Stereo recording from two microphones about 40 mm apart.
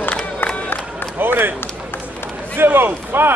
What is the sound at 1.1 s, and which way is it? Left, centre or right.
Run, right.